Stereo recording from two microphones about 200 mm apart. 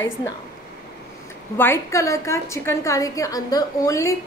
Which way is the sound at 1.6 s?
15° left (ahead or behind).